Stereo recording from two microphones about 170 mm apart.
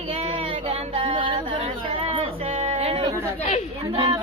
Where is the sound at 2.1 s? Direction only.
40° right (ahead or behind).